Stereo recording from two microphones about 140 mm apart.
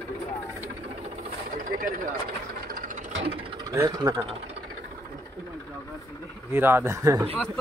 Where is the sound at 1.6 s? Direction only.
75° right (ahead or behind).